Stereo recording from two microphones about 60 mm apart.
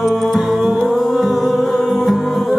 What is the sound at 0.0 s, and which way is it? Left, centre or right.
Music, centre.